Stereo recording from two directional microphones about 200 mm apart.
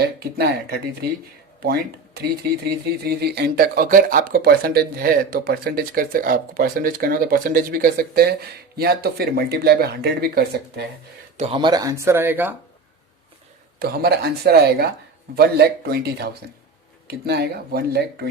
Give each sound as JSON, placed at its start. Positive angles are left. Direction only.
{"t": 0.0, "sound": "speech", "side_deg": -50}
{"t": 11.3, "sound": "speech", "side_deg": -25}
{"t": 13.7, "sound": "speech", "side_deg": -50}